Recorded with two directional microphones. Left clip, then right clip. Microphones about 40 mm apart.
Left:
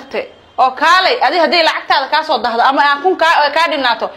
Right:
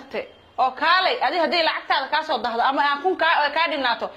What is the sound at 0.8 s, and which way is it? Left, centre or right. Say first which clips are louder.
A woman's voice: left 8 dB; left.